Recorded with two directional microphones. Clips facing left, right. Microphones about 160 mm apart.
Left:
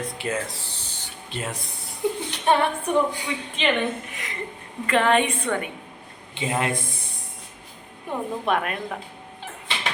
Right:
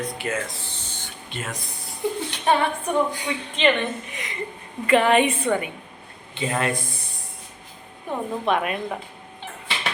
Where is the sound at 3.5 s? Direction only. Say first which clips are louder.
Right 2 dB; 10° left (ahead or behind).